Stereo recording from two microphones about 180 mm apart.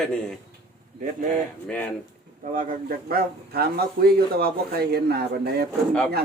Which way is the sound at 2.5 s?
55° right (ahead or behind).